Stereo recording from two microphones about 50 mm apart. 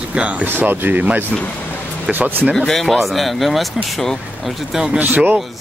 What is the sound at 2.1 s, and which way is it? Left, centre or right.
Speech, centre.